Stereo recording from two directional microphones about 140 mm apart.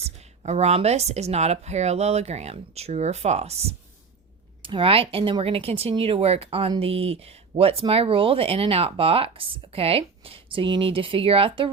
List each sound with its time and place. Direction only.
0.0 s speech: 50° right (ahead or behind)